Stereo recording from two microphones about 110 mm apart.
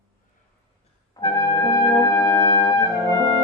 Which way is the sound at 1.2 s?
35° left (ahead or behind).